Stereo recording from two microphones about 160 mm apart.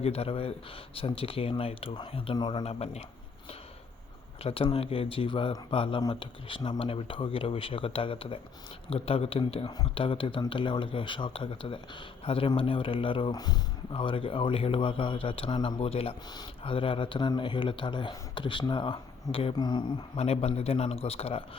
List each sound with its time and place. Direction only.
0.0 s speech: 40° left (ahead or behind)
2.6 s speech: 40° left (ahead or behind)
4.4 s speech: 35° left (ahead or behind)